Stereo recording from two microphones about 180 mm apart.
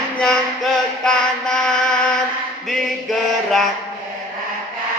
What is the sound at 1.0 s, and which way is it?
Mantra, 5° left (ahead or behind).